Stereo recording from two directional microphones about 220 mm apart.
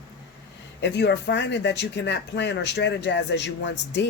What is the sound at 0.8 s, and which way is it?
Speech, 50° left (ahead or behind).